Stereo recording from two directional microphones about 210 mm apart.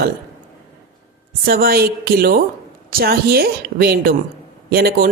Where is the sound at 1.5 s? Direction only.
45° right (ahead or behind).